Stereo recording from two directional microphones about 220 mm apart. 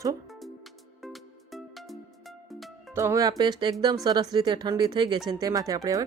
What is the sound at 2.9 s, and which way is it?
A woman's voice, 10° right (ahead or behind).